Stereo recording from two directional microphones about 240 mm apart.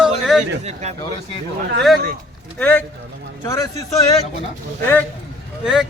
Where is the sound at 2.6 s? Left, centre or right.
Centre.